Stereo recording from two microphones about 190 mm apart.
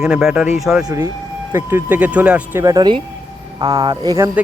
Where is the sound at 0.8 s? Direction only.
15° right (ahead or behind).